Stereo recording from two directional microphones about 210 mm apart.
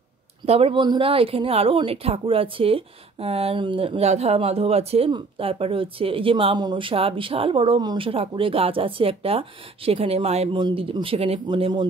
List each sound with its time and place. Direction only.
0.5 s speech: 25° right (ahead or behind)